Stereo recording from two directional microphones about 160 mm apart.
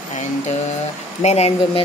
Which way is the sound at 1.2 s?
40° left (ahead or behind).